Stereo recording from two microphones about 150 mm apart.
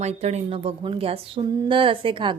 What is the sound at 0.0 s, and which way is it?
A woman's voice, 45° right (ahead or behind).